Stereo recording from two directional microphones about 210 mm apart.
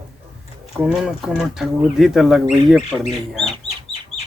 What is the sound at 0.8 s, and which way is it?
Speech, centre (ahead or behind).